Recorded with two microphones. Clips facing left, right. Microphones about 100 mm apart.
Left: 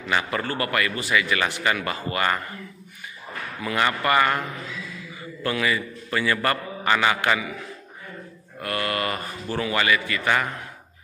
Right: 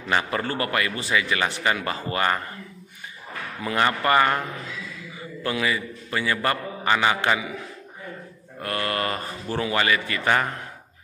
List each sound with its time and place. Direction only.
0.1 s a man's voice: 30° right (ahead or behind)
3.6 s speech: 30° right (ahead or behind)
5.4 s a man's voice: 20° right (ahead or behind)
8.5 s speech: 30° right (ahead or behind)